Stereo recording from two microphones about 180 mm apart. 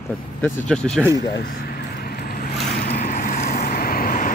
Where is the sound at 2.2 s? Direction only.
55° left (ahead or behind).